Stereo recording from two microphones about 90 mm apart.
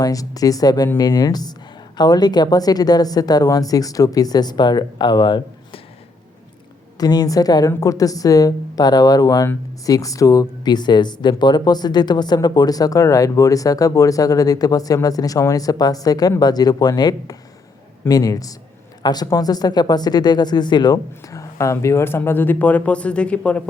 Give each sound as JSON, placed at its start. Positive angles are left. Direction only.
{"t": 0.0, "sound": "speech", "side_deg": 40}
{"t": 7.0, "sound": "speech", "side_deg": 45}